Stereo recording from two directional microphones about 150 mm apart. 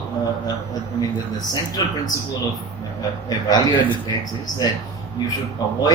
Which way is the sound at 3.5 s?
30° left (ahead or behind).